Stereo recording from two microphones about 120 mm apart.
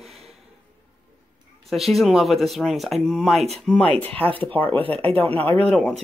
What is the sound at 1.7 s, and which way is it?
Speech, centre (ahead or behind).